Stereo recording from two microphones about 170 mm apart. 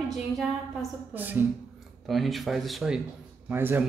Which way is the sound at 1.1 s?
10° right (ahead or behind).